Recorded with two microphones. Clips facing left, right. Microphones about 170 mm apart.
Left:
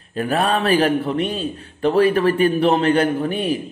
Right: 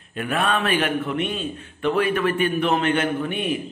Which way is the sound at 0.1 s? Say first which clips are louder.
Left 4 dB; 35° left (ahead or behind).